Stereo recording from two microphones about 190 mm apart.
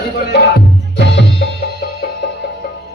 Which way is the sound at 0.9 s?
60° left (ahead or behind).